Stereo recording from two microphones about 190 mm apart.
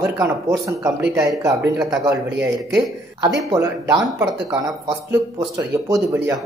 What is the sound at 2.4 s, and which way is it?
A man's voice, 10° right (ahead or behind).